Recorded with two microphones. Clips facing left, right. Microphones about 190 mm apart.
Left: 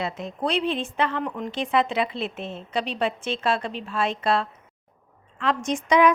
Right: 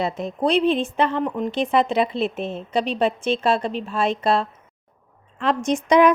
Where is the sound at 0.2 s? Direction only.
50° right (ahead or behind).